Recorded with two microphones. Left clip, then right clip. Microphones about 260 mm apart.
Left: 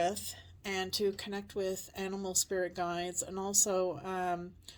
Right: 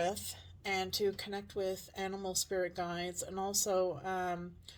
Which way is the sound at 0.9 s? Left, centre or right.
Left.